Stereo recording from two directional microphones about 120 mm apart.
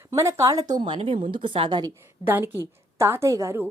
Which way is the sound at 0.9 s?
45° right (ahead or behind).